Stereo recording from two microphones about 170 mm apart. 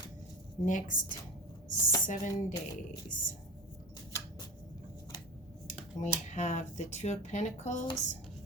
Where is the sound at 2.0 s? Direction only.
45° left (ahead or behind).